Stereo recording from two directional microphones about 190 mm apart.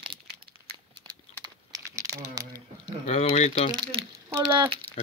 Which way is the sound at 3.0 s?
35° left (ahead or behind).